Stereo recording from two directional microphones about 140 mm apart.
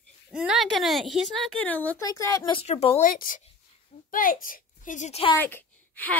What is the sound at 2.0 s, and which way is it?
Speech, 25° left (ahead or behind).